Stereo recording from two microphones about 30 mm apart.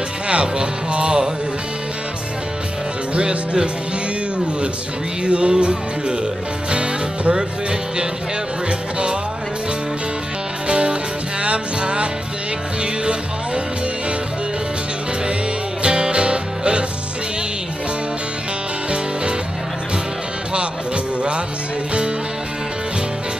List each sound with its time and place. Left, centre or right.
0.3 s speech: right
3.2 s music: right
5.2 s music: right
10.7 s music: right
15.8 s music: right
20.5 s music: right